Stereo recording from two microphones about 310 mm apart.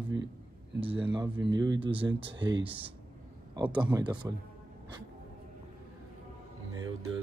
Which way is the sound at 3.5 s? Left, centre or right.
Centre.